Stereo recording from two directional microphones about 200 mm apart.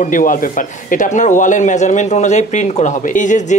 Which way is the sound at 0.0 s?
40° left (ahead or behind).